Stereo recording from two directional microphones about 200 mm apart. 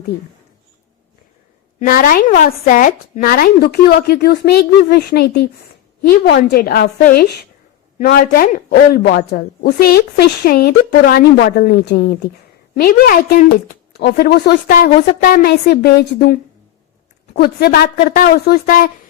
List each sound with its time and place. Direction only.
1.8 s speech: 45° left (ahead or behind)